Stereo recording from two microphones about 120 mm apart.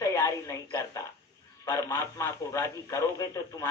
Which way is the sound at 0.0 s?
25° left (ahead or behind).